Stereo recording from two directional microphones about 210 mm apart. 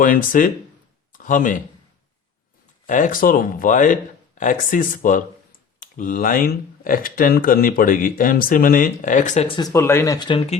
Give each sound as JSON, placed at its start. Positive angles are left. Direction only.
{"t": 0.0, "sound": "a man's voice", "side_deg": 40}
{"t": 2.8, "sound": "speech", "side_deg": 40}